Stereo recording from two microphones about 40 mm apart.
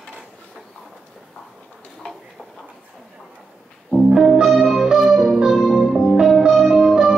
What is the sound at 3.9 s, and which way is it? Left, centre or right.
Music, centre.